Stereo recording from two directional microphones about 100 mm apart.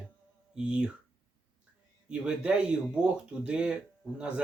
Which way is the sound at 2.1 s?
10° right (ahead or behind).